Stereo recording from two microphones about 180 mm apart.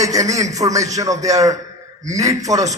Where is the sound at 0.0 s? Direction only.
20° right (ahead or behind).